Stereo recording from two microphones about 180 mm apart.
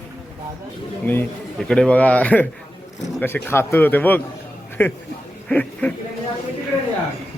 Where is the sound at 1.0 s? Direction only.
10° left (ahead or behind).